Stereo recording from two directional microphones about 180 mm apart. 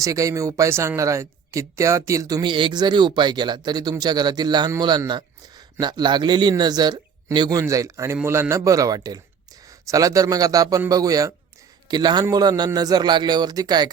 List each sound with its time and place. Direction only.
0.0 s speech: 20° right (ahead or behind)